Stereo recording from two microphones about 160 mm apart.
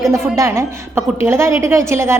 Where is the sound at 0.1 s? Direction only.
20° right (ahead or behind).